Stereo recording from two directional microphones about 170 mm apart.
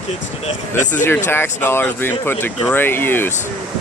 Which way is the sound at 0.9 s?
10° left (ahead or behind).